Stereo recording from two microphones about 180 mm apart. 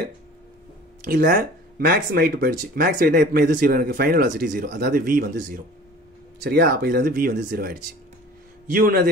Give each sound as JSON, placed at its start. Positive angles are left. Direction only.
{"t": 1.0, "sound": "speech", "side_deg": -55}